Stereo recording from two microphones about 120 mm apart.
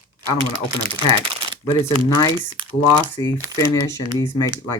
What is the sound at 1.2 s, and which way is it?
Shuffling cards, 45° right (ahead or behind).